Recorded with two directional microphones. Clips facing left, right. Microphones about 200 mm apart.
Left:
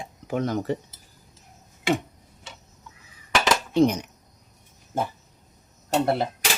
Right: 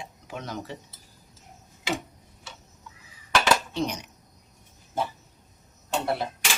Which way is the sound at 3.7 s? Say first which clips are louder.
Left 10 dB; 50° left (ahead or behind).